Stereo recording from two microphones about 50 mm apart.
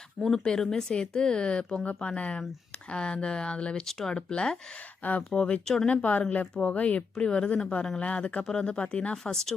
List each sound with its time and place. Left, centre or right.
0.2 s speech: centre
3.8 s speech: centre
5.9 s speech: left
9.3 s speech: centre